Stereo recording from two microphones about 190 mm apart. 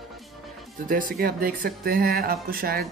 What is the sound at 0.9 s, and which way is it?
Speech, 45° right (ahead or behind).